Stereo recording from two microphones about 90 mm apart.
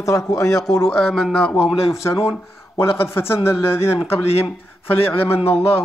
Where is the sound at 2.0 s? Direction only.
30° left (ahead or behind).